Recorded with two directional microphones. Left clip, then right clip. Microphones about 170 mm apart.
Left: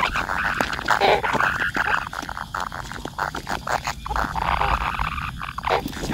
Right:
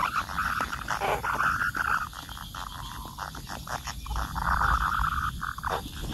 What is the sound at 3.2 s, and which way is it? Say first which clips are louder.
Dog: left 13 dB; 15° left (ahead or behind).